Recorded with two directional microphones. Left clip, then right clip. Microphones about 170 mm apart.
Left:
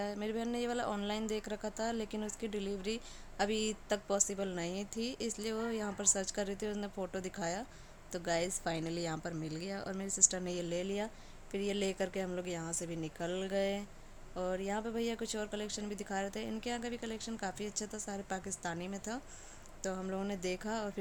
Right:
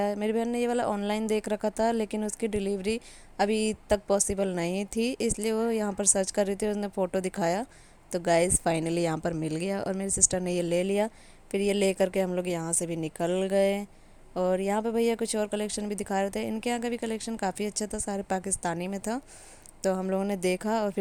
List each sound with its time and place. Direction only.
0.0 s speech: 40° right (ahead or behind)